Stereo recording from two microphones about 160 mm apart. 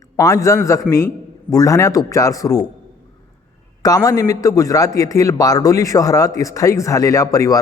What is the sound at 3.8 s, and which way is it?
A man's voice, 25° left (ahead or behind).